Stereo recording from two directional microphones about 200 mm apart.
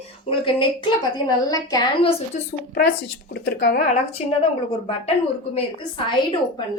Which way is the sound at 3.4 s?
55° left (ahead or behind).